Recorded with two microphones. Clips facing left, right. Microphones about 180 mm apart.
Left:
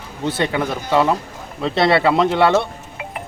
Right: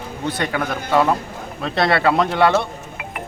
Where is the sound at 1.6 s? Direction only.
25° left (ahead or behind).